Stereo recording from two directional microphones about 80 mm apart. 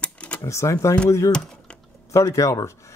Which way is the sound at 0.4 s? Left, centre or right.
Left.